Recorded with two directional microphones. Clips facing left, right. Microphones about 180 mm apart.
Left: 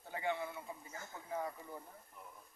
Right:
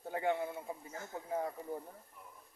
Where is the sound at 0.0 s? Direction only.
50° right (ahead or behind).